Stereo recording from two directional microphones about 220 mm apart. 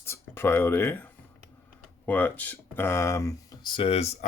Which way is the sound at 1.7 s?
5° left (ahead or behind).